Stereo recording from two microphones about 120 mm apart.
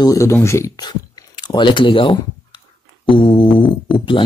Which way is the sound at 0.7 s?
35° left (ahead or behind).